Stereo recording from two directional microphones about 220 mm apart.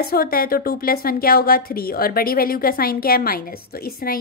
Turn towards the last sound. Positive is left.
turn(degrees=45)  # may be behind; listen again after turning